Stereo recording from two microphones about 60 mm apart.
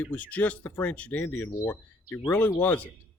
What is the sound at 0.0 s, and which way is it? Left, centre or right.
Speech, left.